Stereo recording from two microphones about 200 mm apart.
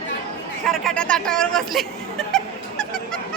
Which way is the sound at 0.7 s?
5° left (ahead or behind).